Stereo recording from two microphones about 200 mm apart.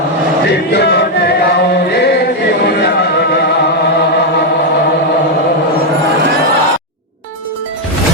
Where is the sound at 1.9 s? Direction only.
55° left (ahead or behind).